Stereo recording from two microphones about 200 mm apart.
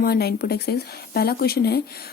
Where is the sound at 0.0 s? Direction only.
50° left (ahead or behind).